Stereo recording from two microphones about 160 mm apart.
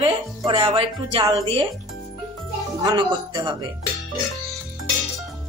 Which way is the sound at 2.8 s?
25° right (ahead or behind).